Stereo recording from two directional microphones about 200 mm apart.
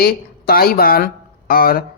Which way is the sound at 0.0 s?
50° left (ahead or behind).